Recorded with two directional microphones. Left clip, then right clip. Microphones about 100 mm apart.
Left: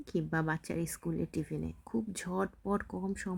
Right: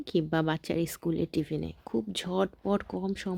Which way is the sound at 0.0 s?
20° right (ahead or behind).